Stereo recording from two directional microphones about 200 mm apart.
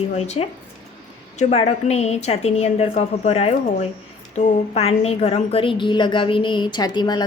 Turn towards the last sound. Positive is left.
turn(degrees=20)  # may be behind; listen again after turning